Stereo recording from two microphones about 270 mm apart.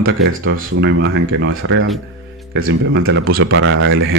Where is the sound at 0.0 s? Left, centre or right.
Right.